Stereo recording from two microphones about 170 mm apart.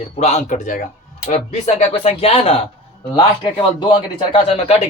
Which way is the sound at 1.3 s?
40° left (ahead or behind).